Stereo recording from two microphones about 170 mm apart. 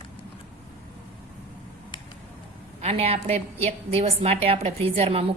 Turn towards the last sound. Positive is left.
turn(degrees=-35)  # may be behind; listen again after turning